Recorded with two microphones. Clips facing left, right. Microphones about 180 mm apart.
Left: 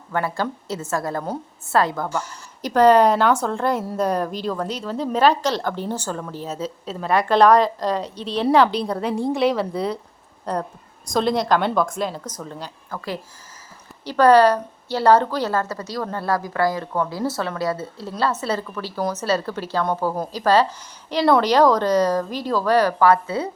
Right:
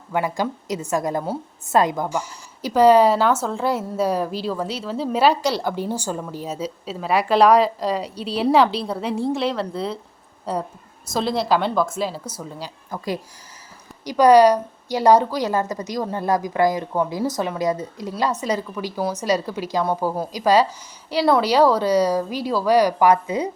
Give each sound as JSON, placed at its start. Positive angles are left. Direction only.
{"t": 0.1, "sound": "a woman's voice", "side_deg": -15}